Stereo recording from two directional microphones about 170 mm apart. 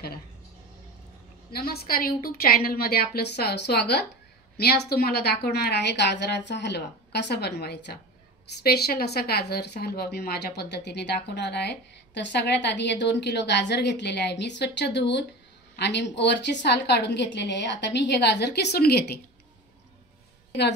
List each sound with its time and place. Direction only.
1.5 s a woman's voice: 65° left (ahead or behind)
4.6 s a woman's voice: 65° left (ahead or behind)